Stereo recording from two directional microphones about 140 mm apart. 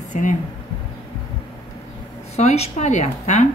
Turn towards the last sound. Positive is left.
turn(degrees=60)  # may be behind; listen again after turning